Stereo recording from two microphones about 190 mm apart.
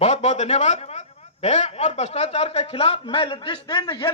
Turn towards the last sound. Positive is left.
turn(degrees=25)  # may be behind; listen again after turning